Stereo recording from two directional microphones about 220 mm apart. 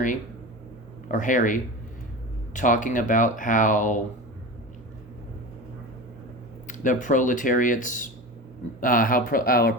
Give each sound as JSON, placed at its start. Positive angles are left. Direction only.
{"t": 1.0, "sound": "speech", "side_deg": 35}
{"t": 6.7, "sound": "speech", "side_deg": 35}